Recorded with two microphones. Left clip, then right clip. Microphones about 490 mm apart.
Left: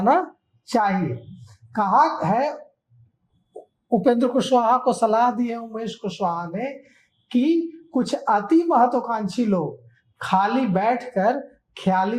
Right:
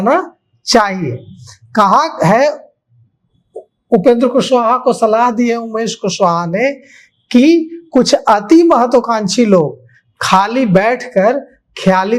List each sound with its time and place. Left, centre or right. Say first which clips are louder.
0.0 s speech: right 6 dB; right
0.7 s speech: right 9 dB; right
3.8 s speech: right 10 dB; centre; by 11.2 s right
11.2 s speech: right 9 dB; right